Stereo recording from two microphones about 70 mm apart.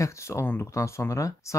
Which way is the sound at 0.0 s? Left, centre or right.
Left.